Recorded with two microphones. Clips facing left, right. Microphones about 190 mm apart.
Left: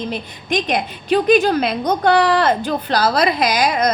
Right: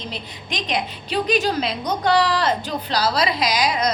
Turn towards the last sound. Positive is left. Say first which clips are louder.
# left 4 dB
turn(degrees=50)  # may be behind; listen again after turning